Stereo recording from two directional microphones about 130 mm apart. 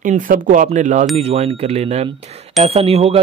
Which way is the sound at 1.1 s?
55° right (ahead or behind).